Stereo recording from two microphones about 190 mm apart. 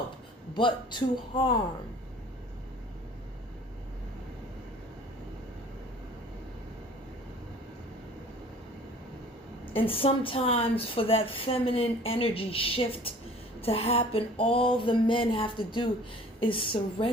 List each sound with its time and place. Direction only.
0.5 s speech: 25° left (ahead or behind)
9.7 s speech: 30° left (ahead or behind)